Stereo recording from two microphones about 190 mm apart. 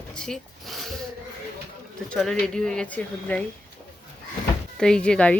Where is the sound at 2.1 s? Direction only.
5° left (ahead or behind).